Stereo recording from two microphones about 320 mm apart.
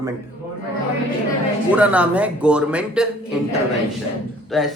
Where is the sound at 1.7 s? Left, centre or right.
Centre.